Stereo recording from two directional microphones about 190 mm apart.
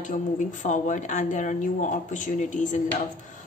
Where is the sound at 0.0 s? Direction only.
45° left (ahead or behind).